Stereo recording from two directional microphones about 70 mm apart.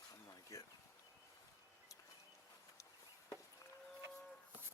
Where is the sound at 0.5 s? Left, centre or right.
Left.